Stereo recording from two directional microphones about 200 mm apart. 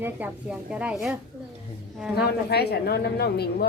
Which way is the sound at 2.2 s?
55° left (ahead or behind).